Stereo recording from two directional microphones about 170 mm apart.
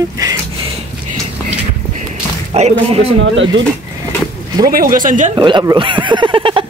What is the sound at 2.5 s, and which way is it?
Speech, 40° right (ahead or behind).